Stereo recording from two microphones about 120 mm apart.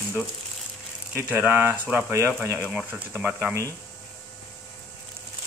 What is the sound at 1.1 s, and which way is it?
Speech, 15° right (ahead or behind).